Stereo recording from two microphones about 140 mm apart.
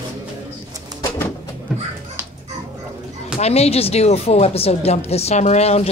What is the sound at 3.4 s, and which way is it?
Speech, 50° left (ahead or behind).